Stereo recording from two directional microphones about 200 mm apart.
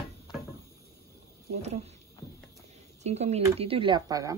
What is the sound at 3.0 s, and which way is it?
Speech, 35° right (ahead or behind).